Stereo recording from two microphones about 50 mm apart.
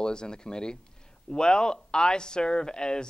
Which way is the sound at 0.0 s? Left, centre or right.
Centre.